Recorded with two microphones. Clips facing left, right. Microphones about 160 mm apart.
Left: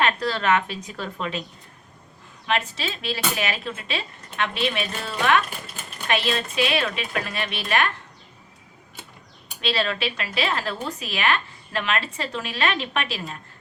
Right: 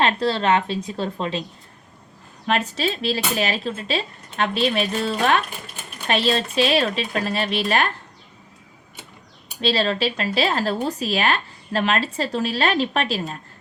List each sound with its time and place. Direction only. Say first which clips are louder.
0.0 s a woman's voice: right 3 dB; 30° right (ahead or behind)
2.5 s speech: right 4 dB; 40° right (ahead or behind)
9.6 s speech: right 4 dB; 35° right (ahead or behind)